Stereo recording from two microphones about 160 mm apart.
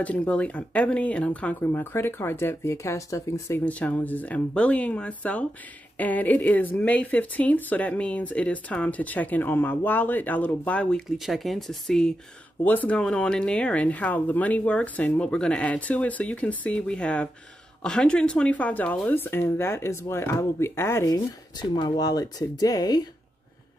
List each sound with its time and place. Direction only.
0.0 s speech: 10° left (ahead or behind); by 23.0 s 25° left (ahead or behind)